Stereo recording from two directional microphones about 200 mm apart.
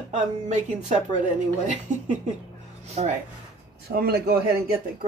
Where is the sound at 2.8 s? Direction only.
35° right (ahead or behind).